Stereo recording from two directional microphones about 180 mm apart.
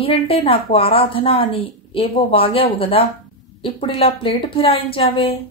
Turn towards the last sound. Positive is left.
turn(degrees=30)  # may be behind; listen again after turning